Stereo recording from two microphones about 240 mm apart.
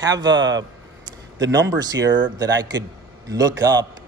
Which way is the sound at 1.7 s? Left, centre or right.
Centre.